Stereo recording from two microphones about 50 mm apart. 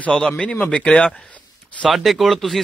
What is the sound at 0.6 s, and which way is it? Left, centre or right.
Speech, left.